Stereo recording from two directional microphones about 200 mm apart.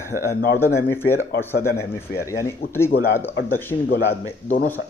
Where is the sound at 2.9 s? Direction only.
50° left (ahead or behind).